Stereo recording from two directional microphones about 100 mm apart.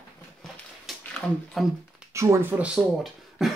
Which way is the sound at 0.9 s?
Centre (ahead or behind).